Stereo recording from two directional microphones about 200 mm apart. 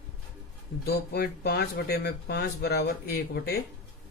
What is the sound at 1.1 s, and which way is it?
Speech, 50° left (ahead or behind).